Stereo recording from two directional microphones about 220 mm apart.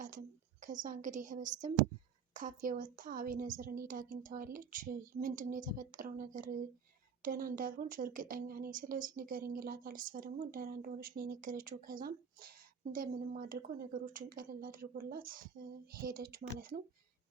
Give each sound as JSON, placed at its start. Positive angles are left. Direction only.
{"t": 0.0, "sound": "a woman's voice", "side_deg": -35}